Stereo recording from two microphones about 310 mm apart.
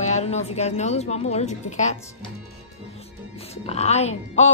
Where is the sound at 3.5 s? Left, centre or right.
Centre.